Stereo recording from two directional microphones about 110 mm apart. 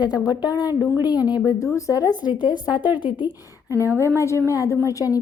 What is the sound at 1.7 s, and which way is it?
Speech, 30° left (ahead or behind).